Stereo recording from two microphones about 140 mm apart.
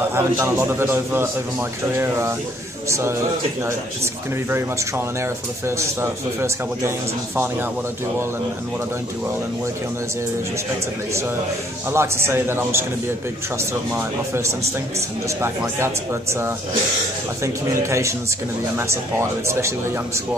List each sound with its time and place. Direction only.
0.1 s a man's voice: 15° right (ahead or behind)
11.9 s a man's voice: 20° right (ahead or behind)